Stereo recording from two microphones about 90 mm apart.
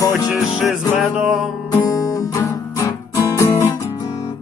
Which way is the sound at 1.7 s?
45° left (ahead or behind).